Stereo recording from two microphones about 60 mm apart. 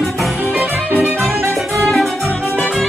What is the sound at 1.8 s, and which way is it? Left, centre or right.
Music, centre.